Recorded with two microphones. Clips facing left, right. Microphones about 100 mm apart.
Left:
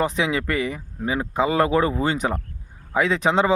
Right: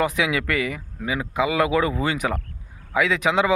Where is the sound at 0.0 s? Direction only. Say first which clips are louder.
Even; 30° left (ahead or behind).